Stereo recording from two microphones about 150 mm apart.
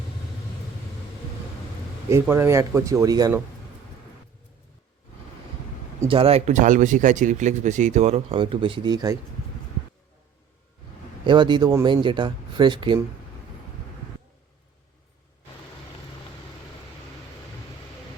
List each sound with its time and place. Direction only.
2.3 s speech: 20° right (ahead or behind)
6.1 s speech: 40° right (ahead or behind)
8.4 s speech: 35° right (ahead or behind)
11.3 s speech: 30° right (ahead or behind)